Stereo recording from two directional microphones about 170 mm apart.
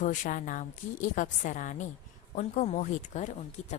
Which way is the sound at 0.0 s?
50° left (ahead or behind).